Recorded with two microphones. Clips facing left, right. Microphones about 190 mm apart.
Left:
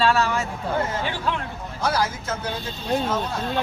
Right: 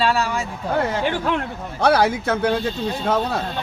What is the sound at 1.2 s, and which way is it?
A man's voice, 65° right (ahead or behind).